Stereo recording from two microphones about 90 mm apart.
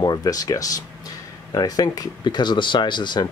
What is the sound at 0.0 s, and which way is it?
Speech, 45° left (ahead or behind).